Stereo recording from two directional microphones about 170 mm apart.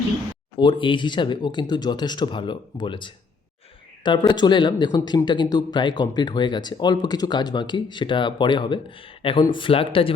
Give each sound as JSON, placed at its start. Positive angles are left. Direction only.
{"t": 0.5, "sound": "speech", "side_deg": 30}